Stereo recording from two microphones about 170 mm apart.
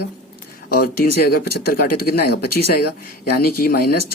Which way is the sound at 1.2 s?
60° left (ahead or behind).